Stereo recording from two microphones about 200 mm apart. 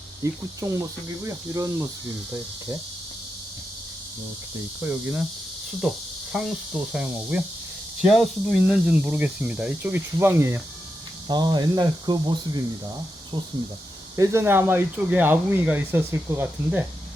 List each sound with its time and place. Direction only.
0.2 s speech: 15° right (ahead or behind)
4.8 s speech: 10° right (ahead or behind)
14.2 s speech: 10° right (ahead or behind)